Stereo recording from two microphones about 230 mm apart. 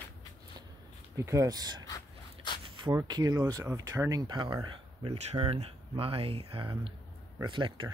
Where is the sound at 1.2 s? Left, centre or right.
Centre.